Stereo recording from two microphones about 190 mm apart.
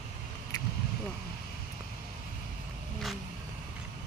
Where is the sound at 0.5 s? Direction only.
20° left (ahead or behind).